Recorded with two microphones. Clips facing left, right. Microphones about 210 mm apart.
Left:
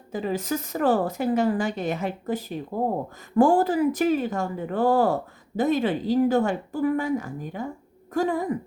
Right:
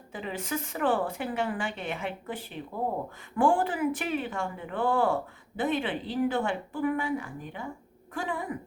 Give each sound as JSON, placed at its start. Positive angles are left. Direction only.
{"t": 0.1, "sound": "a woman's voice", "side_deg": 40}